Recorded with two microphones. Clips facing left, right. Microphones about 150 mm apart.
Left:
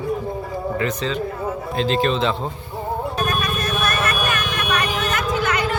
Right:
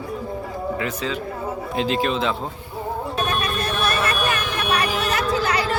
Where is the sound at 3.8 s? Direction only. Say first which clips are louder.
Right 1 dB; 30° right (ahead or behind).